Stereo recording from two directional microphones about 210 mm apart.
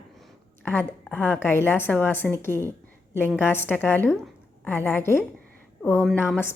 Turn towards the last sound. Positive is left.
turn(degrees=10)  # may be behind; listen again after turning